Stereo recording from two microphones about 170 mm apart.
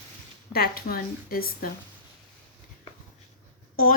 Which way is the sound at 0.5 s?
65° left (ahead or behind).